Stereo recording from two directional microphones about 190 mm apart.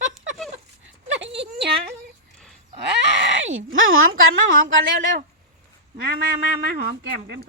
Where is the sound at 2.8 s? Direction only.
65° right (ahead or behind).